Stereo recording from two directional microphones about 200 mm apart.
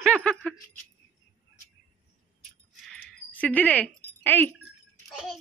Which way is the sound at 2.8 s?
5° left (ahead or behind).